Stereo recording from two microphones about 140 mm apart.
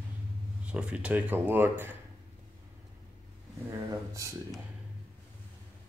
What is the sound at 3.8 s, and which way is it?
Speech, 25° right (ahead or behind).